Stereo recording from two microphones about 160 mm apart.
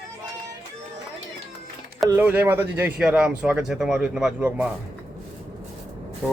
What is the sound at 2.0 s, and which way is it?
Speech, 15° right (ahead or behind).